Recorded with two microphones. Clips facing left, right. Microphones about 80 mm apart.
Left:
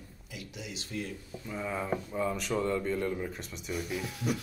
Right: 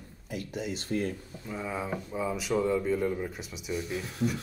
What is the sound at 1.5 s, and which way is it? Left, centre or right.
Speech, centre.